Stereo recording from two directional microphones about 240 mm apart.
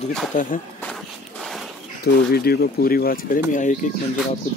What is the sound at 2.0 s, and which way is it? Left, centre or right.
Speech, left.